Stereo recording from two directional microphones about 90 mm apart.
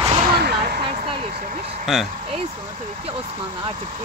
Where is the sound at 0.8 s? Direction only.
90° right.